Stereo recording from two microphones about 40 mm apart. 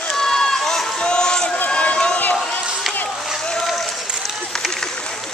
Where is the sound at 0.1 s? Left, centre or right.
Centre.